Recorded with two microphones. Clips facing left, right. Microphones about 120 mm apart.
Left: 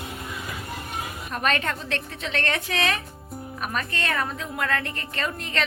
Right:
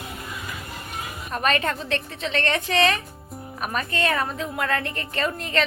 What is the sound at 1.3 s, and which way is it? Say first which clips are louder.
A woman's voice: right 3 dB; centre (ahead or behind).